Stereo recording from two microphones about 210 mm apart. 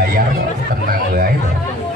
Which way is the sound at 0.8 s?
45° right (ahead or behind).